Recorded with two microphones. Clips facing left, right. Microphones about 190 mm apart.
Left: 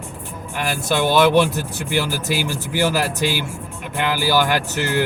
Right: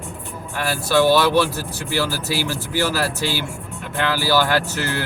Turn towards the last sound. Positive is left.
turn(degrees=15)  # may be behind; listen again after turning